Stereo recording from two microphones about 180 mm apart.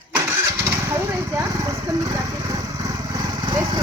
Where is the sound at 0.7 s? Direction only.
15° right (ahead or behind).